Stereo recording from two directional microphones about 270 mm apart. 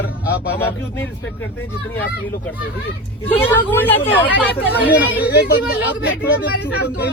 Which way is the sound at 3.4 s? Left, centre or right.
Centre.